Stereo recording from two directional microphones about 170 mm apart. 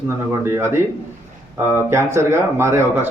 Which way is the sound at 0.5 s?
15° right (ahead or behind).